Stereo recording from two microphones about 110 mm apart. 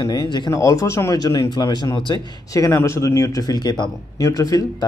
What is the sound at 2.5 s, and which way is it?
Speech, 30° left (ahead or behind).